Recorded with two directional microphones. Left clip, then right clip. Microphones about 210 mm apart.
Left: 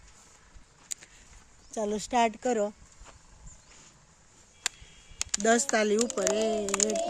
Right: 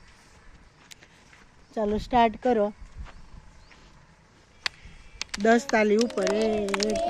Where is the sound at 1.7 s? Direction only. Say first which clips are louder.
Right 4 dB; 5° right (ahead or behind).